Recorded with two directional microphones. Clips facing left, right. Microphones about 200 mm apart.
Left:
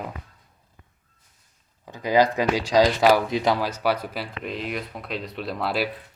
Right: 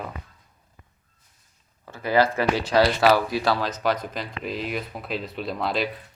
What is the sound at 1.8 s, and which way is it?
Speech, 15° left (ahead or behind).